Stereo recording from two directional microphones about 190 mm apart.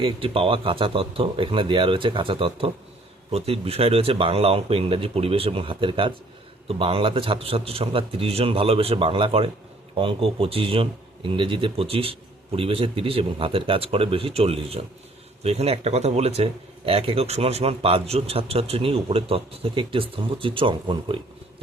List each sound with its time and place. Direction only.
0.0 s speech: 30° right (ahead or behind)